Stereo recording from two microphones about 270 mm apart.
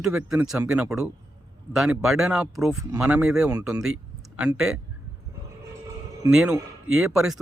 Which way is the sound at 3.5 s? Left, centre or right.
Centre.